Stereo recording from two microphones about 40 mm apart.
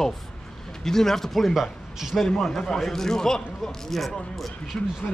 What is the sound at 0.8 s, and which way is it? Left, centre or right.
Speech, centre.